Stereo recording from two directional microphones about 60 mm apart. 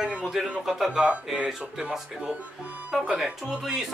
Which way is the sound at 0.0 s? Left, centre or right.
Centre.